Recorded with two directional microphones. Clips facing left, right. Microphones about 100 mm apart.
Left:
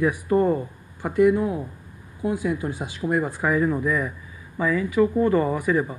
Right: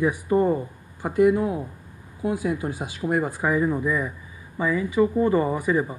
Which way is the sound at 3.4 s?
20° right (ahead or behind).